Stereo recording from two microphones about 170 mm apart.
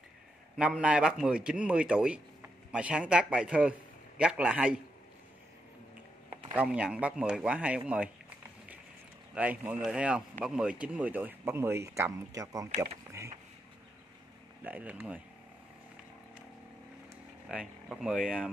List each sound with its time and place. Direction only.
0.6 s a man's voice: 5° right (ahead or behind)
6.3 s speech: 10° right (ahead or behind)
9.3 s speech: 10° right (ahead or behind)
12.7 s speech: 35° right (ahead or behind)
14.6 s speech: 10° right (ahead or behind)
17.5 s a man's voice: 5° right (ahead or behind)